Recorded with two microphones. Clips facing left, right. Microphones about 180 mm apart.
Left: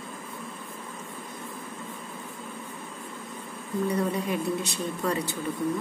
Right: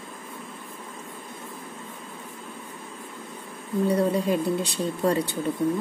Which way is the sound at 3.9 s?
30° right (ahead or behind).